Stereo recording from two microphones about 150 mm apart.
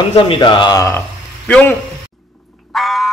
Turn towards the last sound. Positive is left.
turn(degrees=0)  # may be behind; listen again after turning